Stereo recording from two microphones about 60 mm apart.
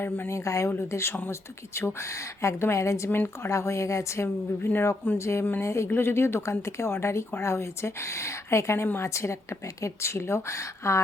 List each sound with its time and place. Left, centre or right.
0.3 s speech: left
5.9 s speech: left